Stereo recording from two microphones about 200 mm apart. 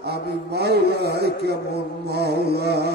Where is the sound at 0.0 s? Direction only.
55° right (ahead or behind).